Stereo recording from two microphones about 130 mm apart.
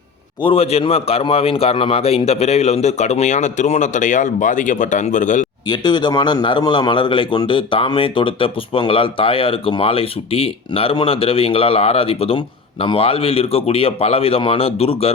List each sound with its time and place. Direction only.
0.4 s a man's voice: 50° left (ahead or behind); by 5.5 s 75° left (ahead or behind)
5.6 s a man's voice: 35° left (ahead or behind); by 15.1 s 50° left (ahead or behind)